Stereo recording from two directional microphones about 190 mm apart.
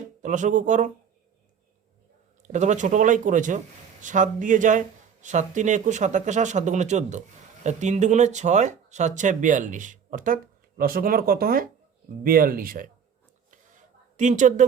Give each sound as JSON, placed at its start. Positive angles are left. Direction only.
{"t": 0.2, "sound": "speech", "side_deg": -40}
{"t": 2.4, "sound": "speech", "side_deg": -40}
{"t": 14.2, "sound": "speech", "side_deg": -40}